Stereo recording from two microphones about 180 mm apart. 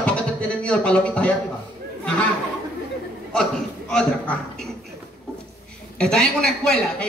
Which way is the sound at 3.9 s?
5° left (ahead or behind).